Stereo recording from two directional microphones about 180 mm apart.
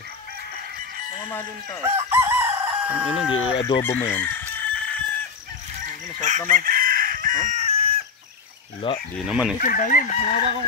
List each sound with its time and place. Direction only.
1.8 s chicken: 15° right (ahead or behind)
3.3 s speech: 25° left (ahead or behind)
4.0 s chicken: 10° left (ahead or behind)
6.2 s chicken: 45° right (ahead or behind)
8.8 s speech: 30° left (ahead or behind)
9.2 s speech: 5° right (ahead or behind)
9.6 s chicken: 50° left (ahead or behind)